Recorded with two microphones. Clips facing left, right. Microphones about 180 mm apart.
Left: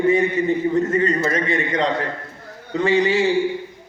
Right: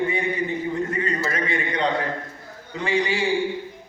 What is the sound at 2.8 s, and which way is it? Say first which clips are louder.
Speech: left 6 dB; 40° left (ahead or behind).